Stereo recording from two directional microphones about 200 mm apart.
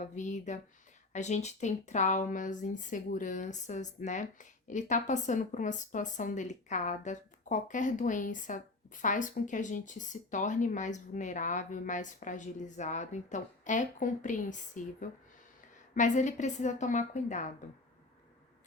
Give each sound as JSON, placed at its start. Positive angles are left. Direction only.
{"t": 0.0, "sound": "speech", "side_deg": 35}
{"t": 16.0, "sound": "speech", "side_deg": 40}